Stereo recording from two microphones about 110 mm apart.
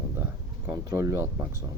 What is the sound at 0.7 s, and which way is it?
Speech, 30° right (ahead or behind).